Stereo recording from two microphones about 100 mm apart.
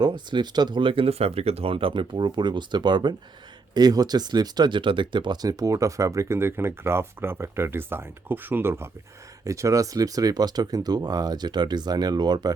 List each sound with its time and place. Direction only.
0.0 s speech: 50° right (ahead or behind)